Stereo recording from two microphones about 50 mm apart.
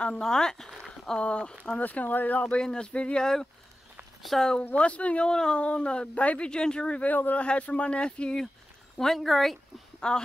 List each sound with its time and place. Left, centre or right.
0.0 s speech: centre
0.8 s a sound: centre
1.2 s speech: left
1.8 s speech: left
2.5 s speech: centre
5.3 s speech: centre
8.9 s speech: centre
9.9 s speech: centre